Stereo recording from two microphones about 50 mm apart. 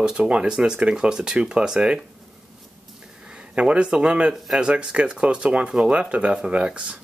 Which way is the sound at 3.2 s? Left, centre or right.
Centre.